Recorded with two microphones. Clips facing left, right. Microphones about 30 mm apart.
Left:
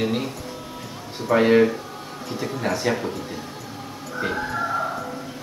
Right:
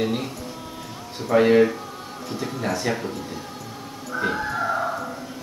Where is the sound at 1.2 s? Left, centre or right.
Centre.